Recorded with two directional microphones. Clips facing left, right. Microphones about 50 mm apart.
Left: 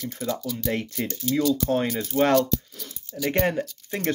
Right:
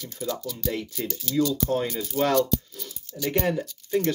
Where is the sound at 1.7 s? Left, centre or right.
Left.